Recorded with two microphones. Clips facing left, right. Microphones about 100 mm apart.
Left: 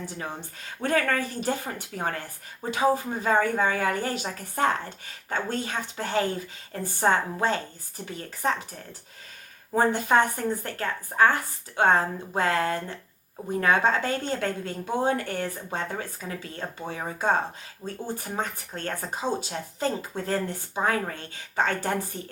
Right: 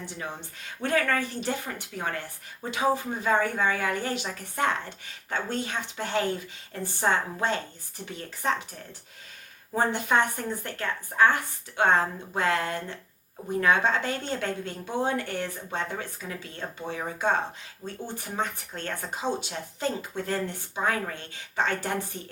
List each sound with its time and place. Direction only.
0.8 s a woman's voice: 40° left (ahead or behind)
9.7 s a woman's voice: 40° left (ahead or behind)
17.8 s speech: 15° left (ahead or behind)
18.2 s speech: 45° left (ahead or behind)